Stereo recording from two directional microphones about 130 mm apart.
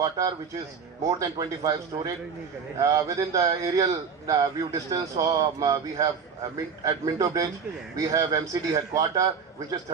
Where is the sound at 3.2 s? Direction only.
25° right (ahead or behind).